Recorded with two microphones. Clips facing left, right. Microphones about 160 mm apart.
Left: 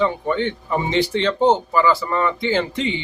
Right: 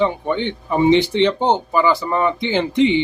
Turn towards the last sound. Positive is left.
turn(degrees=-20)  # may be behind; listen again after turning